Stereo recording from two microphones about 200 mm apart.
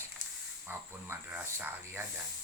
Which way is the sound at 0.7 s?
10° right (ahead or behind).